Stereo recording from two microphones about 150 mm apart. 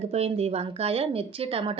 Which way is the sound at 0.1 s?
40° right (ahead or behind).